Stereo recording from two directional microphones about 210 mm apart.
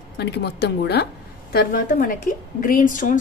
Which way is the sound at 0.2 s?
50° left (ahead or behind).